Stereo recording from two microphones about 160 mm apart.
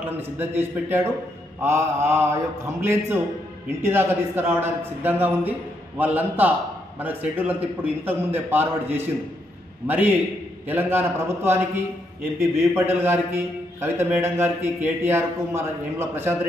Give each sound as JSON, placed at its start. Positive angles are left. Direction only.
{"t": 0.4, "sound": "a man's voice", "side_deg": -15}